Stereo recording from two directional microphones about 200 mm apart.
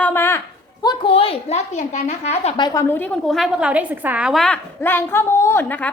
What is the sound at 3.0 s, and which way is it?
A woman's voice, 5° left (ahead or behind).